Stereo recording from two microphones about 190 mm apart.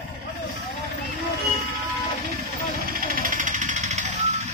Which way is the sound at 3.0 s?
50° right (ahead or behind).